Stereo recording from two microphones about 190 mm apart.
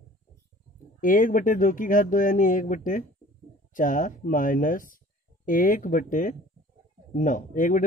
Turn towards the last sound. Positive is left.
turn(degrees=45)  # may be behind; listen again after turning